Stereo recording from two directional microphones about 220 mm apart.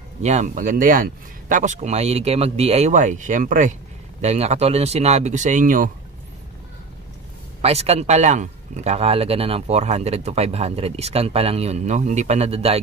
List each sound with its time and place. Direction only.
0.2 s speech: 30° right (ahead or behind)
7.6 s speech: 30° right (ahead or behind)